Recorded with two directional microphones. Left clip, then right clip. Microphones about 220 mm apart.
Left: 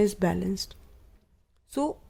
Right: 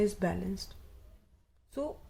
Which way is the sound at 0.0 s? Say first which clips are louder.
Left 6 dB; 35° left (ahead or behind).